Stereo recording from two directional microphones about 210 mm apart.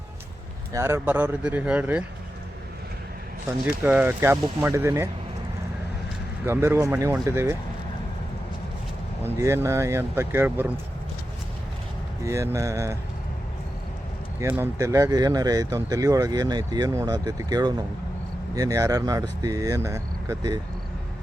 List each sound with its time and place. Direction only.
0.7 s speech: 15° right (ahead or behind)
3.8 s speech: 10° right (ahead or behind)
6.4 s speech: 10° right (ahead or behind)
9.2 s speech: 10° right (ahead or behind)
12.2 s speech: 15° right (ahead or behind)
14.3 s speech: 10° right (ahead or behind)